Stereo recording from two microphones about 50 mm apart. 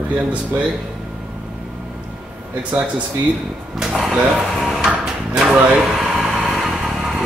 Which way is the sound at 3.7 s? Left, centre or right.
Centre.